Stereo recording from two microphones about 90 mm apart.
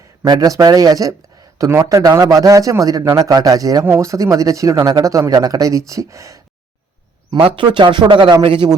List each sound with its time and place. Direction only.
0.3 s speech: 40° right (ahead or behind)
3.8 s speech: 30° right (ahead or behind)
7.3 s speech: 80° right